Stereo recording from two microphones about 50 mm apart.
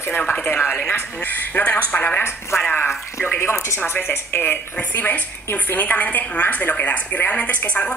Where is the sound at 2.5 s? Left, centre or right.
Left.